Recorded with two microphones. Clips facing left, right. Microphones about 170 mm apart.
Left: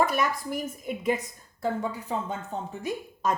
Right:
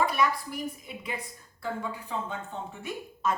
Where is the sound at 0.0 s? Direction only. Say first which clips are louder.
Left 1 dB; 45° left (ahead or behind).